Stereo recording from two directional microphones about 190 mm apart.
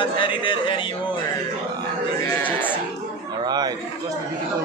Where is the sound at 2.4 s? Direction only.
10° left (ahead or behind).